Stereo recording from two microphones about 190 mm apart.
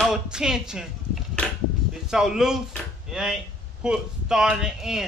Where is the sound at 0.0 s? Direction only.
5° right (ahead or behind).